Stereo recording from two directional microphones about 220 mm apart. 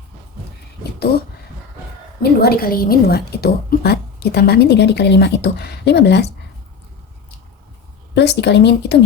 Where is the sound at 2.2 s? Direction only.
45° left (ahead or behind).